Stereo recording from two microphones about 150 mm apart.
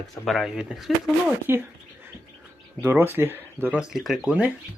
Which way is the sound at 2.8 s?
15° right (ahead or behind).